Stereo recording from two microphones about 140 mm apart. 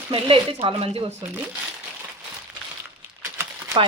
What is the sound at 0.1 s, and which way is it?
Speech, 40° right (ahead or behind).